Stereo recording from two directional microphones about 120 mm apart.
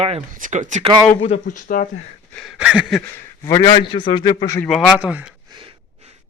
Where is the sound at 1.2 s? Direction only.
75° left (ahead or behind).